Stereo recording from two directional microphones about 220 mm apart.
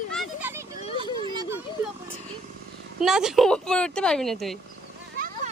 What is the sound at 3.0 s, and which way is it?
Speech, 5° right (ahead or behind).